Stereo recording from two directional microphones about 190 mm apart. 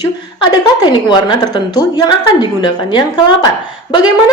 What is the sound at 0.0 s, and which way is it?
A woman's voice, 20° left (ahead or behind).